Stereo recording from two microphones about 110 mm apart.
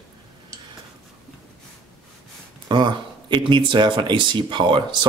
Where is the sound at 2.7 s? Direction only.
45° right (ahead or behind).